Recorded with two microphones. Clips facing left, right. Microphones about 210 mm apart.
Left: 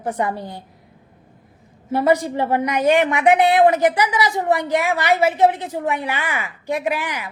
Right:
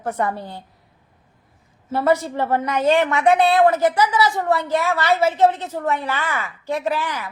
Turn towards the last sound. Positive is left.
turn(degrees=15)  # may be behind; listen again after turning